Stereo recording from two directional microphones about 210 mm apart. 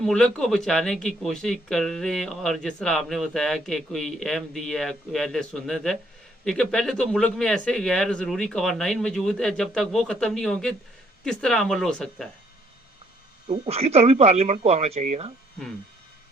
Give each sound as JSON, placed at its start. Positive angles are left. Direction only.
{"t": 0.0, "sound": "speech", "side_deg": 5}
{"t": 13.5, "sound": "speech", "side_deg": -30}